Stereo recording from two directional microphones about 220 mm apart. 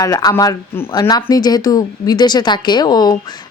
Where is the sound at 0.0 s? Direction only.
15° left (ahead or behind).